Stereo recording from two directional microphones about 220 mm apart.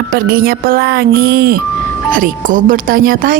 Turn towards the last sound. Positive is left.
turn(degrees=-40)  # may be behind; listen again after turning